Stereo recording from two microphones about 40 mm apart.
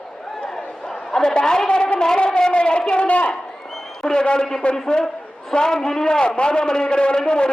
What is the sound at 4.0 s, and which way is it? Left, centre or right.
A man's voice, centre.